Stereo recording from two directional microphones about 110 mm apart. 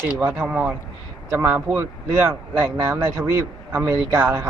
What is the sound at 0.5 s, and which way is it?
Speech, 10° right (ahead or behind).